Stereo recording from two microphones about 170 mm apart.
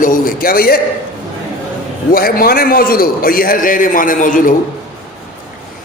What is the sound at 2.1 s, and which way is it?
A man's voice, 60° left (ahead or behind).